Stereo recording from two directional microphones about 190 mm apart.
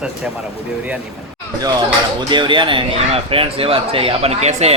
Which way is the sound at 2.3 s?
25° right (ahead or behind).